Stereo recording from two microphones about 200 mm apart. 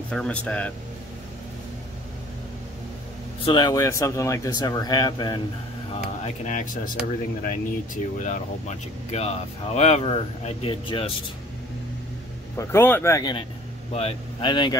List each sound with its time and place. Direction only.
0.1 s a man's voice: 5° left (ahead or behind)
3.4 s a man's voice: 20° left (ahead or behind)
6.2 s speech: 40° left (ahead or behind)
12.5 s a man's voice: 10° left (ahead or behind)